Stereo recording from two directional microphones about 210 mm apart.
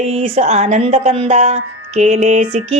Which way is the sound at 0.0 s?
30° right (ahead or behind).